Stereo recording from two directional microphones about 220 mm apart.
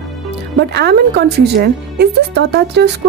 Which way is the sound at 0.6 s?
50° right (ahead or behind).